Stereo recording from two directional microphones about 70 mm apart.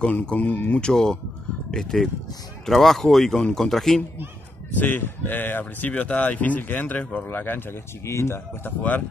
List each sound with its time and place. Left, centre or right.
0.0 s a man's voice: centre
4.7 s speech: left
8.6 s speech: left